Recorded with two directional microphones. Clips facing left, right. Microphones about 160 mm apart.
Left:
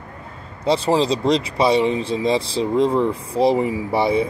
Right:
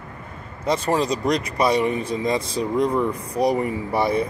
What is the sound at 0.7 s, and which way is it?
Speech, 30° left (ahead or behind).